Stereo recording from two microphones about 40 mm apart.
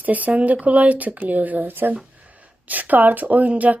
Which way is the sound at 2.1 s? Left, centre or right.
Right.